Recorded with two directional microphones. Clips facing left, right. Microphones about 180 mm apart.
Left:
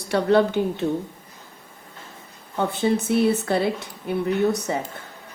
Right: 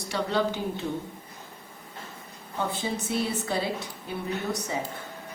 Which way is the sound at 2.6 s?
65° left (ahead or behind).